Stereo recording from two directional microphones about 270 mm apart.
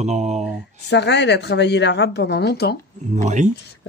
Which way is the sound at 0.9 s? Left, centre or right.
Left.